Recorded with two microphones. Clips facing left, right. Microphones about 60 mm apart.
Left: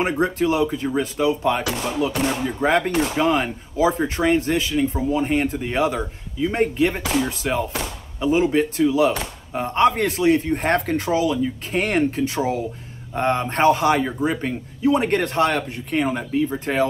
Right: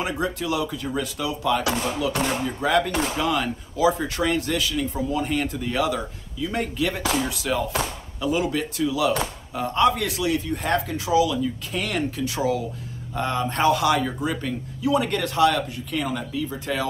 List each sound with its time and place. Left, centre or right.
0.0 s speech: left